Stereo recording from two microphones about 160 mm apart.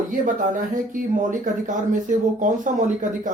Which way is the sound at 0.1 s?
60° right (ahead or behind).